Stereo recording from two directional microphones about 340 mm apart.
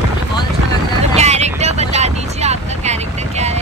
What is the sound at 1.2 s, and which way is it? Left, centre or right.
Vehicle, centre.